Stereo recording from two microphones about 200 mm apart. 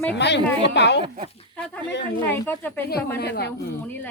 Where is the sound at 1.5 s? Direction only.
5° left (ahead or behind).